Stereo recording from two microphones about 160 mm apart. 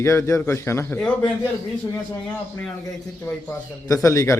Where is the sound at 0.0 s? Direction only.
15° left (ahead or behind).